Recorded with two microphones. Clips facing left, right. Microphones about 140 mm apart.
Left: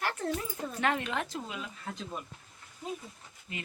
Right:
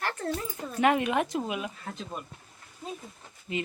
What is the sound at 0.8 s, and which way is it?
Speech, 15° right (ahead or behind).